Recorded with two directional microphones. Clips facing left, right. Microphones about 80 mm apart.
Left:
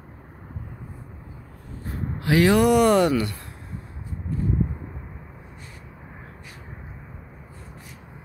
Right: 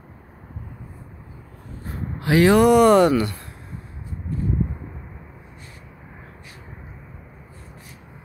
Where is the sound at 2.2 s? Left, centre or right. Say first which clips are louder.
Right 3 dB; right.